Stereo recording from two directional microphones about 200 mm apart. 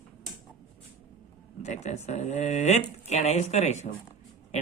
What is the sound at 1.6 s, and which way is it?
Speech, 35° left (ahead or behind).